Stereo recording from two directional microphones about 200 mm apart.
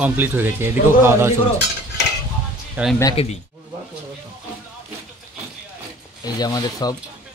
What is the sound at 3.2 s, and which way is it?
Speech, 30° left (ahead or behind).